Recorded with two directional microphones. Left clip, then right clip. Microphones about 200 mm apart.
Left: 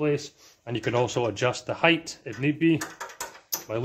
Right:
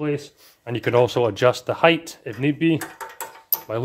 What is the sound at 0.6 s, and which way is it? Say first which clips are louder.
Speech: right 7 dB; 35° right (ahead or behind).